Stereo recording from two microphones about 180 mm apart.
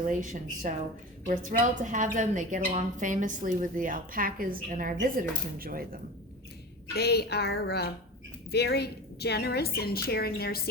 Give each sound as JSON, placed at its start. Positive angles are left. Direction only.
{"t": 0.0, "sound": "a woman's voice", "side_deg": -45}
{"t": 6.9, "sound": "a woman's voice", "side_deg": 65}